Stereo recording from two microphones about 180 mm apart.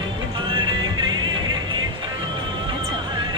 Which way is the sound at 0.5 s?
25° right (ahead or behind).